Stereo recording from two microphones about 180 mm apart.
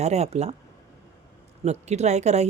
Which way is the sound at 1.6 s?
40° right (ahead or behind).